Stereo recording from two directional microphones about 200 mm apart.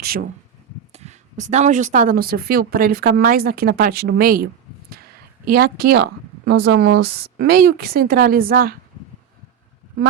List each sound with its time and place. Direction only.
0.0 s speech: 50° right (ahead or behind)
0.9 s speech: 35° right (ahead or behind)
5.5 s speech: 50° right (ahead or behind)